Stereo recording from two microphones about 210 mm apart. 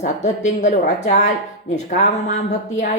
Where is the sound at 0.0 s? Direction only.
35° left (ahead or behind).